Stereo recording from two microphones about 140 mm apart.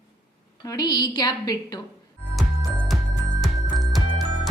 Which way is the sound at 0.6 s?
30° left (ahead or behind).